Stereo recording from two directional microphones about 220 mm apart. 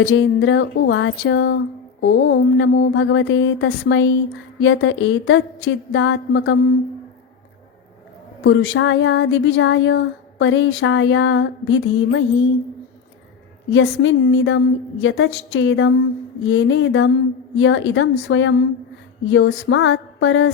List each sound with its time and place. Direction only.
0.0 s speech: 60° left (ahead or behind)
8.4 s speech: 60° left (ahead or behind)
13.7 s speech: 60° left (ahead or behind)